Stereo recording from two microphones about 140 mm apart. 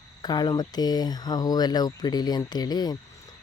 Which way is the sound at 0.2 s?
30° left (ahead or behind).